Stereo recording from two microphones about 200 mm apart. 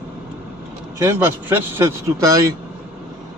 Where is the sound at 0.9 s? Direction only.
10° right (ahead or behind).